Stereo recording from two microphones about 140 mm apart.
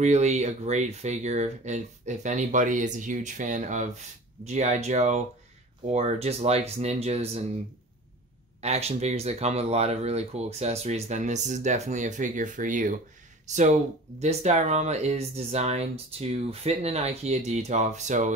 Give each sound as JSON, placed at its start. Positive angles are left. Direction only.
{"t": 0.0, "sound": "speech", "side_deg": -55}
{"t": 8.5, "sound": "speech", "side_deg": -50}